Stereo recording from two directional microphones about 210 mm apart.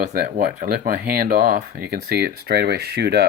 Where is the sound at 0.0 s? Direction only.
40° right (ahead or behind).